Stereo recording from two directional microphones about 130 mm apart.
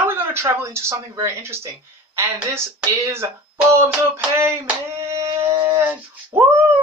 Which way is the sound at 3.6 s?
20° right (ahead or behind).